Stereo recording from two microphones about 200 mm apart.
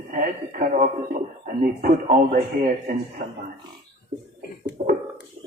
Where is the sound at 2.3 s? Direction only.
45° right (ahead or behind).